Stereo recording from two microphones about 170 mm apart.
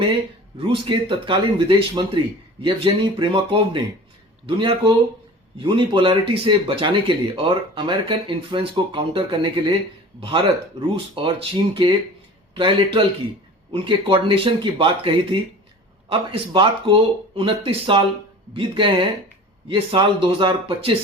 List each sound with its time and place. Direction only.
0.7 s speech: 30° right (ahead or behind)